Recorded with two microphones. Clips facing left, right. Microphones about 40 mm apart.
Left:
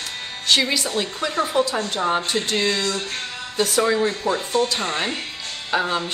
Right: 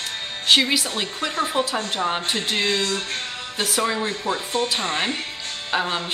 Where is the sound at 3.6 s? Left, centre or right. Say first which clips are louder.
Left 4 dB; centre.